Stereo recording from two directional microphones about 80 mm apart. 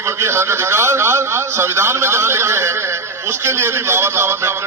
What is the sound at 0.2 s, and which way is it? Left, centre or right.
A man's voice, right.